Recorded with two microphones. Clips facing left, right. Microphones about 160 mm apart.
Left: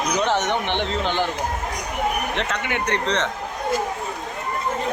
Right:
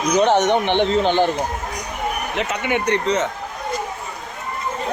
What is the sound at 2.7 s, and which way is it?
Speech, 10° right (ahead or behind).